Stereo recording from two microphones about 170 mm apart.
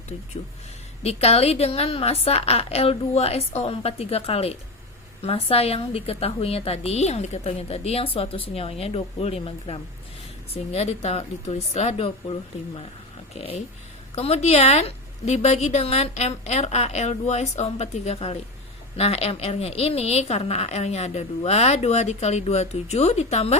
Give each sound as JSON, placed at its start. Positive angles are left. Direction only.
{"t": 1.0, "sound": "a woman's voice", "side_deg": 40}
{"t": 14.2, "sound": "a woman's voice", "side_deg": 35}